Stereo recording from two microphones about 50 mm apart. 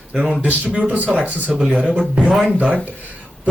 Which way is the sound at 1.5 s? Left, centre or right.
Centre.